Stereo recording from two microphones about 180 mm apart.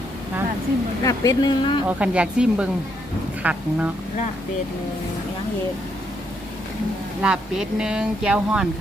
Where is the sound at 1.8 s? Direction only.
5° right (ahead or behind).